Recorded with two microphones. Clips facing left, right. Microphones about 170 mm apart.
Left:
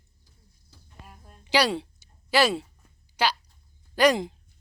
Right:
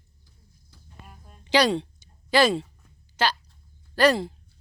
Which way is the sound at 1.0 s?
Centre (ahead or behind).